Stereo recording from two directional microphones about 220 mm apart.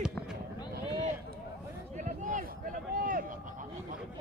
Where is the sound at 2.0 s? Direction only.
35° right (ahead or behind).